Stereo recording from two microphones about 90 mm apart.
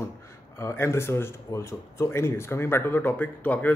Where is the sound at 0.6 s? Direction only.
30° left (ahead or behind).